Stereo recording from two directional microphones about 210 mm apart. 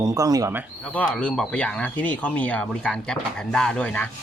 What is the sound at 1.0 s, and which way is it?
Speech, 5° left (ahead or behind).